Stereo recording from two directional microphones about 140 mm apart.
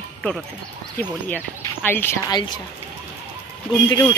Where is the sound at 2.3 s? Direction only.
35° left (ahead or behind).